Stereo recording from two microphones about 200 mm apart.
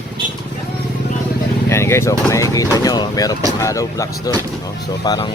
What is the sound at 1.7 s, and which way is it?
Speech, 15° left (ahead or behind).